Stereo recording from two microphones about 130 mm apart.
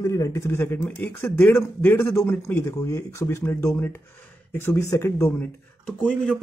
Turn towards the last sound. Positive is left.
turn(degrees=0)  # may be behind; listen again after turning